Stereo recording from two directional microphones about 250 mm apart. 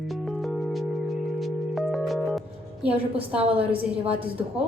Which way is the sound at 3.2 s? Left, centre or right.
Right.